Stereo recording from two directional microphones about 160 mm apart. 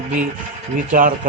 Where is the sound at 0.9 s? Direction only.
55° right (ahead or behind).